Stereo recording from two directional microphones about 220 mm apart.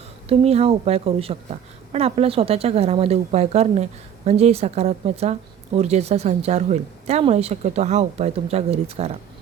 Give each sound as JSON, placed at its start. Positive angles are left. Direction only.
{"t": 0.3, "sound": "speech", "side_deg": -25}